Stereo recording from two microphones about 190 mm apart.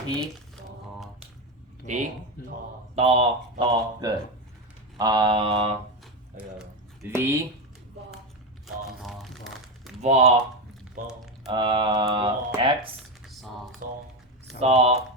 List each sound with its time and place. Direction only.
2.9 s speech: 30° right (ahead or behind)
7.1 s speech: 15° right (ahead or behind)
8.6 s crumpling: centre (ahead or behind)
10.0 s speech: 35° right (ahead or behind)
11.0 s speech: 45° right (ahead or behind)
11.4 s speech: 25° right (ahead or behind)
13.8 s speech: 45° right (ahead or behind)
14.6 s speech: 35° right (ahead or behind)